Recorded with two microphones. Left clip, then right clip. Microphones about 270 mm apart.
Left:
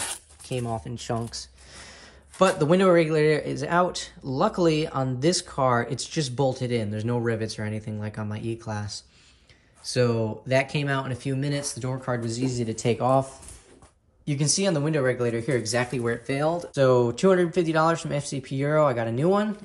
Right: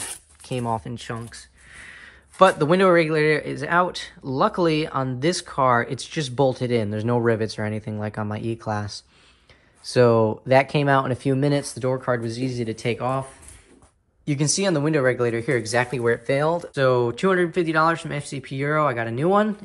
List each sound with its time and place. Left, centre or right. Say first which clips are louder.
0.0 s speech: left 2 dB; centre
1.3 s a sound: left 3 dB; centre
2.3 s speech: right 4 dB; centre